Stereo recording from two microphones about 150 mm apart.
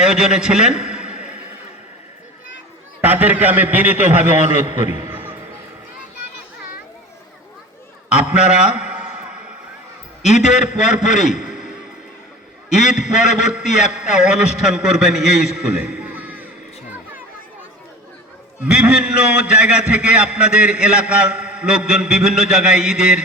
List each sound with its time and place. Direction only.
0.0 s a man's voice: 5° right (ahead or behind)
3.0 s a man's voice: 10° right (ahead or behind)
5.0 s a sound: 10° right (ahead or behind)
8.1 s a man's voice: 5° right (ahead or behind)
10.7 s a man's voice: 50° left (ahead or behind)
11.3 s a sound: 5° right (ahead or behind)
12.8 s a man's voice: centre (ahead or behind)
18.6 s a man's voice: 5° right (ahead or behind)